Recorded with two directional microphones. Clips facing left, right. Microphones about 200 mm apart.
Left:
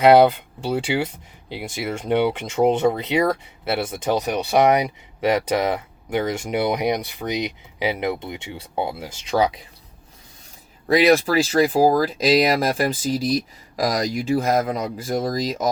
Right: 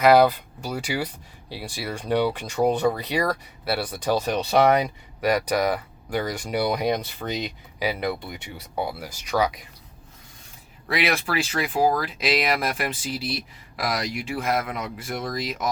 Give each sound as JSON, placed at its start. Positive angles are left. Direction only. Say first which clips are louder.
{"t": 0.0, "sound": "speech", "louder": "left 3 dB", "side_deg": 25}
{"t": 10.8, "sound": "speech", "louder": "left 9 dB", "side_deg": 40}